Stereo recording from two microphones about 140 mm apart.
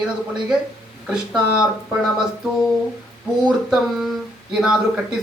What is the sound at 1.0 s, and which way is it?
Speech, 5° right (ahead or behind).